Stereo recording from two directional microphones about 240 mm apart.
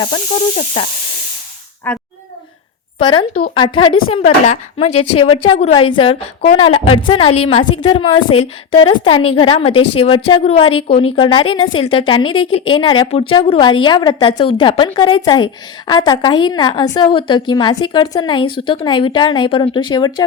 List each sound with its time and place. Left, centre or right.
0.1 s a woman's voice: left
1.9 s a child's voice: centre
3.5 s a woman's voice: centre